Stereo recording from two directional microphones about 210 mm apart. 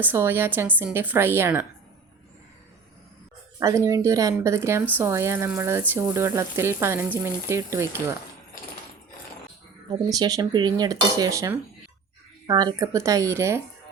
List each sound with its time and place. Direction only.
0.0 s speech: 10° right (ahead or behind)
3.6 s speech: 15° right (ahead or behind)
9.9 s speech: 15° right (ahead or behind)